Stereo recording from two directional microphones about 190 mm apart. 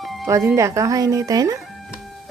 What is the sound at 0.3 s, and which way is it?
A woman's voice, 15° right (ahead or behind).